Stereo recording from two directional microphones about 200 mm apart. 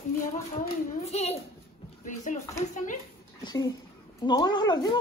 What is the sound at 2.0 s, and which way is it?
Speech, 40° left (ahead or behind).